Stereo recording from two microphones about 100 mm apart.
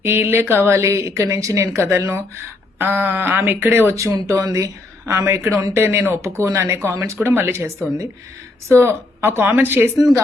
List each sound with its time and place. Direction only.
0.0 s a woman's voice: 20° right (ahead or behind)